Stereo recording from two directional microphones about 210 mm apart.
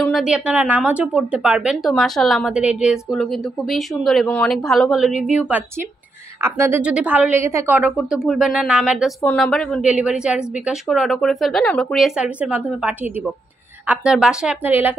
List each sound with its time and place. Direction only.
0.0 s a woman's voice: centre (ahead or behind)